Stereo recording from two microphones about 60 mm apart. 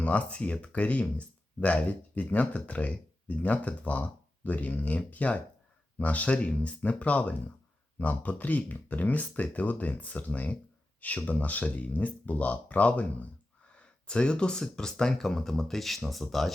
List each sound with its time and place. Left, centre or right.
0.0 s speech: left; by 16.5 s centre